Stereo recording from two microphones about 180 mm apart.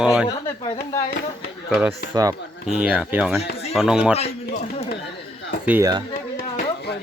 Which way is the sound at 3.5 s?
35° left (ahead or behind).